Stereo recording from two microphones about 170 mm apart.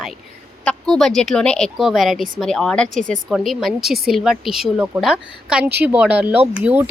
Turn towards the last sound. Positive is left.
turn(degrees=-10)  # may be behind; listen again after turning